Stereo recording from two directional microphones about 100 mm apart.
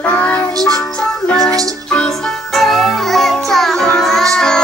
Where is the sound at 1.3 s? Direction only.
5° left (ahead or behind).